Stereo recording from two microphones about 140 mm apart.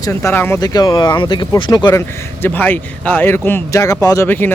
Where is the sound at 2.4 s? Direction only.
15° left (ahead or behind).